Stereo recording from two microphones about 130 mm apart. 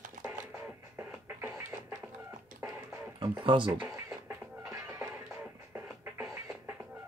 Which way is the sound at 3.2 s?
40° right (ahead or behind).